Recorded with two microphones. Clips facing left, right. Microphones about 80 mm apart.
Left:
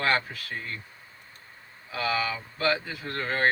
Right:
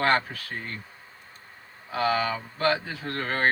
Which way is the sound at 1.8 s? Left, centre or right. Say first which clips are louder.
Right 3 dB; right.